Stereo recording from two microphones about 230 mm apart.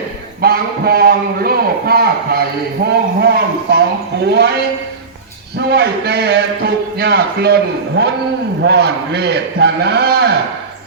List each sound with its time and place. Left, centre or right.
0.4 s a man's voice: right
5.5 s a man's voice: right